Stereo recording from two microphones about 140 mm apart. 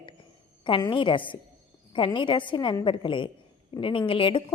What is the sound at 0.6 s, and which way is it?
A woman's voice, 35° left (ahead or behind).